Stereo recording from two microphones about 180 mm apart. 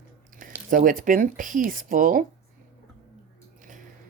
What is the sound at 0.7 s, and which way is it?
Speech, 50° right (ahead or behind).